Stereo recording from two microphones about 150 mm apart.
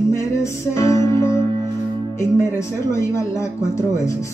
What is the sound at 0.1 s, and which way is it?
Music, 20° left (ahead or behind).